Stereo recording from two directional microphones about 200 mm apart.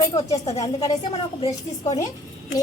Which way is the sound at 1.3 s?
30° left (ahead or behind).